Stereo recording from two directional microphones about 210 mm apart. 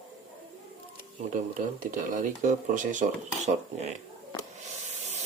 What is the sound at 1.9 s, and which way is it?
Speech, 40° right (ahead or behind).